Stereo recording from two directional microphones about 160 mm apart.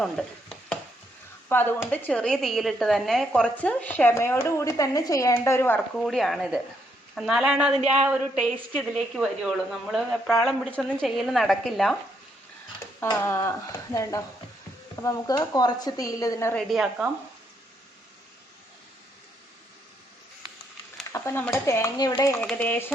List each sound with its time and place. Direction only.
0.0 s chopping: 5° left (ahead or behind)
1.5 s a woman's voice: 15° left (ahead or behind)
6.1 s speech: centre (ahead or behind)
13.1 s a woman's voice: 15° left (ahead or behind)
16.6 s speech: centre (ahead or behind)
21.1 s speech: 15° left (ahead or behind)
22.4 s a woman's voice: 10° left (ahead or behind)